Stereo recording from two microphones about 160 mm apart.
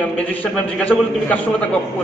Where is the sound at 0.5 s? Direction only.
5° left (ahead or behind).